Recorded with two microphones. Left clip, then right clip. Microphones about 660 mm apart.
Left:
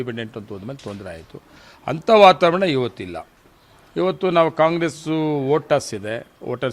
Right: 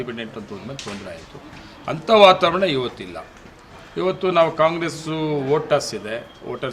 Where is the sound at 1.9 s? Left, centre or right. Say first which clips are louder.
Left 1 dB; left.